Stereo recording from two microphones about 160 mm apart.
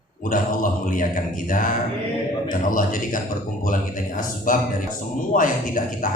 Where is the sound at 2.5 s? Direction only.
60° left (ahead or behind).